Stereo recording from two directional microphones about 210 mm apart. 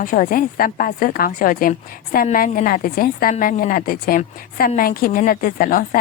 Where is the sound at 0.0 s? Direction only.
40° left (ahead or behind).